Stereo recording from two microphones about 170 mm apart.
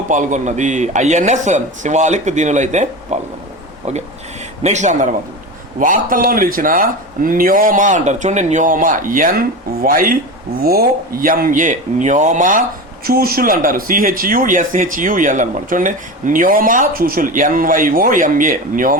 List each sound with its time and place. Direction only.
0.1 s speech: 45° right (ahead or behind)
4.6 s speech: 45° right (ahead or behind)
13.1 s speech: 60° right (ahead or behind)